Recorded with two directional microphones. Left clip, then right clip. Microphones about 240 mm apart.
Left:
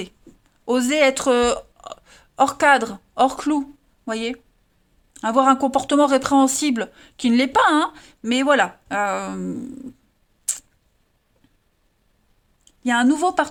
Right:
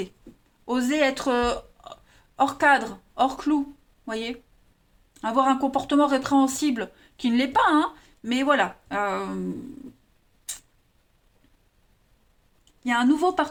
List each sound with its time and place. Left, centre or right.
0.6 s speech: left
12.8 s speech: left